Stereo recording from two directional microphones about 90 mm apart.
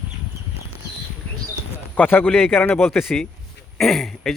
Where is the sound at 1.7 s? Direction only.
20° left (ahead or behind).